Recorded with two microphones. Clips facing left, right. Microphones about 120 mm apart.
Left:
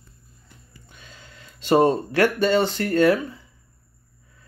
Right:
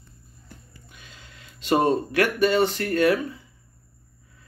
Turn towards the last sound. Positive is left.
turn(degrees=30)  # may be behind; listen again after turning